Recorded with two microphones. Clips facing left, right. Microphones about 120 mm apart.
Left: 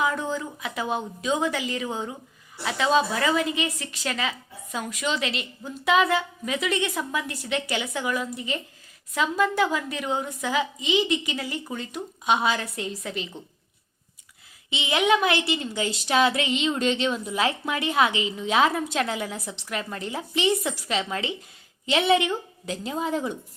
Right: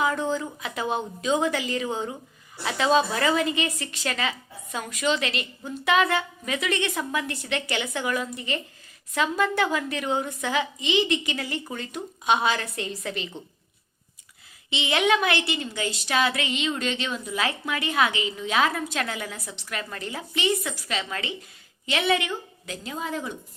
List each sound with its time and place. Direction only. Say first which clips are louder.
0.0 s a woman's voice: right 1 dB; 5° left (ahead or behind)
14.7 s a woman's voice: left 1 dB; 10° left (ahead or behind); by 23.3 s 25° left (ahead or behind)